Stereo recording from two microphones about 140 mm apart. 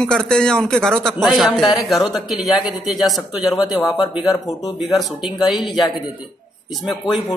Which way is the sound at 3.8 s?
25° left (ahead or behind).